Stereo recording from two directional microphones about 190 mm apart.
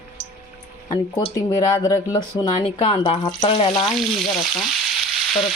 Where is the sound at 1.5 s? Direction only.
20° left (ahead or behind).